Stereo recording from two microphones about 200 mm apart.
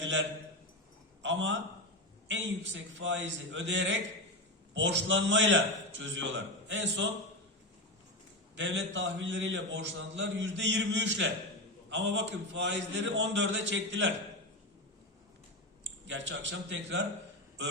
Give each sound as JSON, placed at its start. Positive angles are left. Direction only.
{"t": 0.0, "sound": "a man's voice", "side_deg": -65}
{"t": 8.5, "sound": "a man's voice", "side_deg": -65}
{"t": 15.8, "sound": "speech", "side_deg": -65}